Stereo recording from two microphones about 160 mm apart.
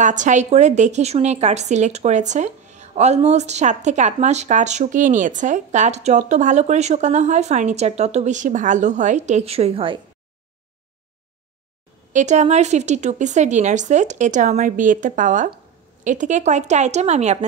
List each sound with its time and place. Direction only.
0.0 s a woman's voice: 50° right (ahead or behind)
12.1 s a woman's voice: 50° right (ahead or behind)